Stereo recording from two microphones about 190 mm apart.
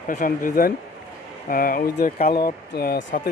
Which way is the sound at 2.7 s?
55° left (ahead or behind).